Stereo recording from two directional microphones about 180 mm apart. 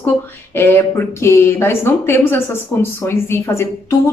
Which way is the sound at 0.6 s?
15° left (ahead or behind).